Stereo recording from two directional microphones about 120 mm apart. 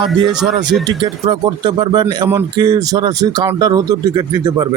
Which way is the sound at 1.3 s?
40° right (ahead or behind).